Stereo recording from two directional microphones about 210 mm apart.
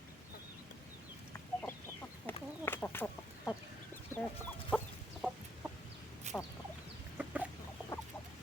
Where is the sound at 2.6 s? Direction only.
10° left (ahead or behind).